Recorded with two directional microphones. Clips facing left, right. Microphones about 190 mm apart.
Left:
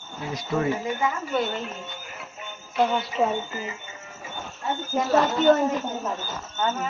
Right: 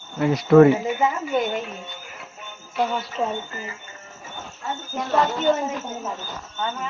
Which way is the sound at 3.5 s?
20° left (ahead or behind).